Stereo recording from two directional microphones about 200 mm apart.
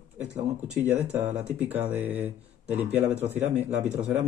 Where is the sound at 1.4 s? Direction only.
10° right (ahead or behind).